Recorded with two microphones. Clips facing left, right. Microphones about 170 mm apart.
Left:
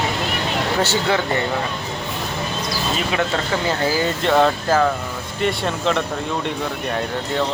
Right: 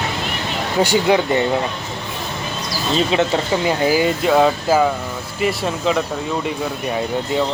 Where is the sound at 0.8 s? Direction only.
15° right (ahead or behind).